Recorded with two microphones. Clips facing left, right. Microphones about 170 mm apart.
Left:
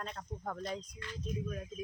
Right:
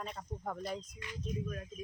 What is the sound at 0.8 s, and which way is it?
Speech, 25° right (ahead or behind).